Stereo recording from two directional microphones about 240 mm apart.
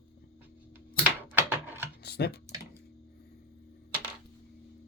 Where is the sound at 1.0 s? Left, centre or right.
Centre.